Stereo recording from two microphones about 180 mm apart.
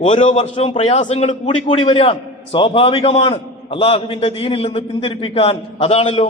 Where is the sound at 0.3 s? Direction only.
30° left (ahead or behind).